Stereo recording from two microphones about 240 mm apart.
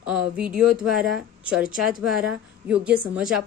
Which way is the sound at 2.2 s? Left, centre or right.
Centre.